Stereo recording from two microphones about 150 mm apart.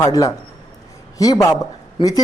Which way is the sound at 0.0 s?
25° left (ahead or behind).